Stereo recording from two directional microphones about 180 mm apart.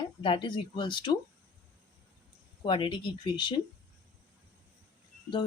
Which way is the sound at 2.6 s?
25° left (ahead or behind).